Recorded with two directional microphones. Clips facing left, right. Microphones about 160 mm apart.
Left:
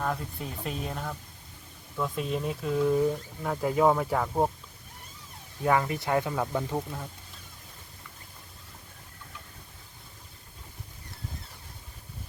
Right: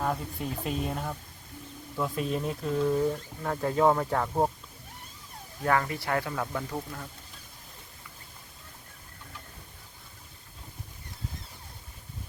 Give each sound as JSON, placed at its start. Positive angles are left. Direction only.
{"t": 0.0, "sound": "speech", "side_deg": -5}
{"t": 5.6, "sound": "speech", "side_deg": 15}